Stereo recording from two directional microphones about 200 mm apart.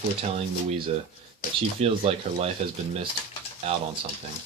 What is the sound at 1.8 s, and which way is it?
Speech, 30° right (ahead or behind).